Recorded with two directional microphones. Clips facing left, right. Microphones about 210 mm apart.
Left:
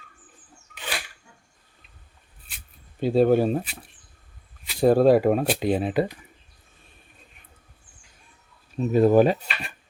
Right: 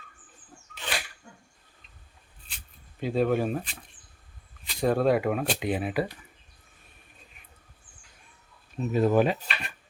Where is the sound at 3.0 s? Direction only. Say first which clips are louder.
Left 6 dB; 30° left (ahead or behind).